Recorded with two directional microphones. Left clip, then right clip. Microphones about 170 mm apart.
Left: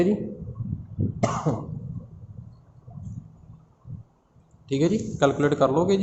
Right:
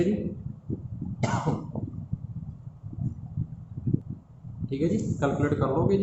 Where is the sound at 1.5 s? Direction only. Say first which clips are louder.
Left 3 dB; 50° left (ahead or behind).